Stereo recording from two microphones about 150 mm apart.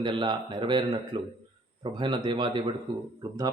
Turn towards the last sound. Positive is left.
turn(degrees=-25)  # may be behind; listen again after turning